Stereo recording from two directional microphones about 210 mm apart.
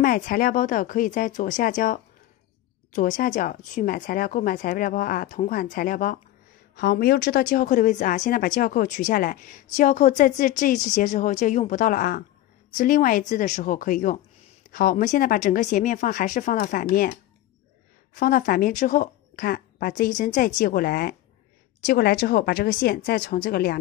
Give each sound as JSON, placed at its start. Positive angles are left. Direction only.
{"t": 0.0, "sound": "a woman's voice", "side_deg": 45}